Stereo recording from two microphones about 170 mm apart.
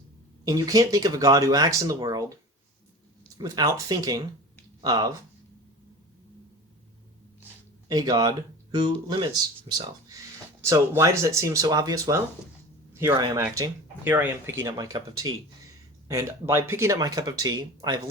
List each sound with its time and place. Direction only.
0.4 s speech: 20° right (ahead or behind)
3.3 s speech: 20° right (ahead or behind)
7.9 s speech: 25° right (ahead or behind)
9.7 s speech: 40° right (ahead or behind)
10.6 s speech: 15° right (ahead or behind)
12.9 s a sound: 15° right (ahead or behind)
13.1 s speech: 25° right (ahead or behind)
13.4 s speech: 10° right (ahead or behind)